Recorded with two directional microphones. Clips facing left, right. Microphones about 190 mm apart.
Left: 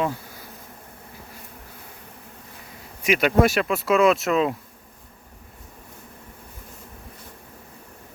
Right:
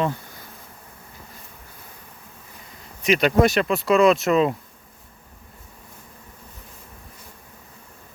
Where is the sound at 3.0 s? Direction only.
5° left (ahead or behind).